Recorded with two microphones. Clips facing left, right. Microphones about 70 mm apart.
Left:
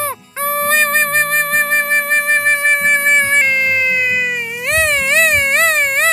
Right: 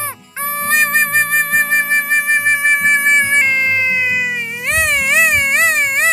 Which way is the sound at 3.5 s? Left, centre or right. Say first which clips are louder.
Even; right.